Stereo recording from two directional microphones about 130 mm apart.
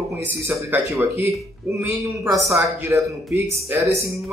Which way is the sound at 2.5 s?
20° right (ahead or behind).